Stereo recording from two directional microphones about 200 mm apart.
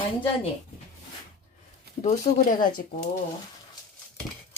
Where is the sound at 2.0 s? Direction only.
35° left (ahead or behind).